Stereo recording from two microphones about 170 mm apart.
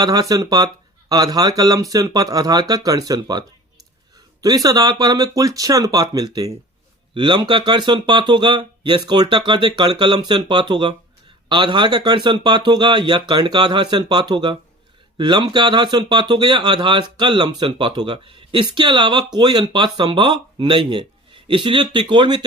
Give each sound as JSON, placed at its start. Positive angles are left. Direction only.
{"t": 0.0, "sound": "speech", "side_deg": -20}